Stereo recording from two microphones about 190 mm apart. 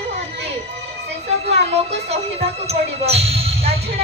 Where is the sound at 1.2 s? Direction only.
35° right (ahead or behind).